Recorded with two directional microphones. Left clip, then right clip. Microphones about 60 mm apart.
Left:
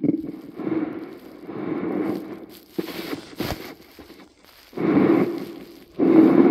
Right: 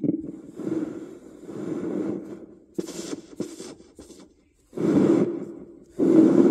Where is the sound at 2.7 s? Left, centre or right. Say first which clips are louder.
Left 3 dB; right.